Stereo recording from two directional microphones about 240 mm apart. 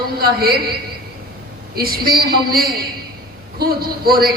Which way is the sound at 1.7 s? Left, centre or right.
Right.